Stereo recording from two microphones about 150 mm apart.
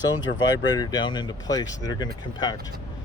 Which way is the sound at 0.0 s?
25° left (ahead or behind).